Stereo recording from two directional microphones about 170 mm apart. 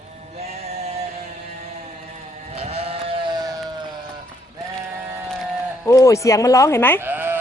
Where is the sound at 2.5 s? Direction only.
35° right (ahead or behind).